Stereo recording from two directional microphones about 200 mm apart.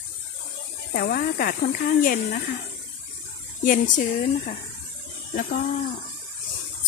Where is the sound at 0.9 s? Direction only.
50° left (ahead or behind).